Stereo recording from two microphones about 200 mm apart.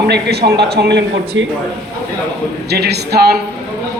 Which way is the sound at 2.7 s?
55° right (ahead or behind).